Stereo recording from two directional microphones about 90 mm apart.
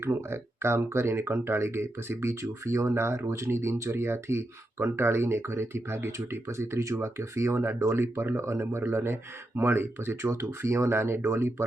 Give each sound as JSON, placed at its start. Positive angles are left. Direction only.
{"t": 0.0, "sound": "speech", "side_deg": -25}